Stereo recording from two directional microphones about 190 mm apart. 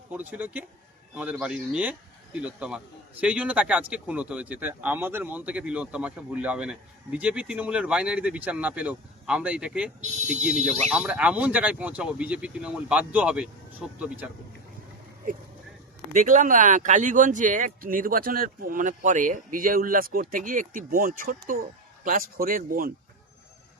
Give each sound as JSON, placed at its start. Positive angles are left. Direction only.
{"t": 0.1, "sound": "speech", "side_deg": -10}
{"t": 16.1, "sound": "speech", "side_deg": -40}